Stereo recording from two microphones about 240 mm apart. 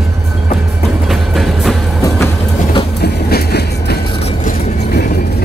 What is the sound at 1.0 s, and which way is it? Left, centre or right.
Music, centre.